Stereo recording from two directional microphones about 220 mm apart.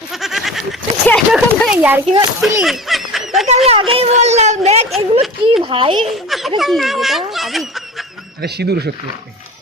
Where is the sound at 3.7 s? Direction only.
25° right (ahead or behind).